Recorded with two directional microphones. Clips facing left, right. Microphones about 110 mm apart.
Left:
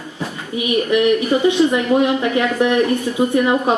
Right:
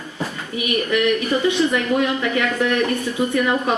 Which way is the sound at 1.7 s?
20° left (ahead or behind).